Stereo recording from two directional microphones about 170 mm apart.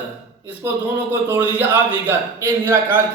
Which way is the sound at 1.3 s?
10° right (ahead or behind).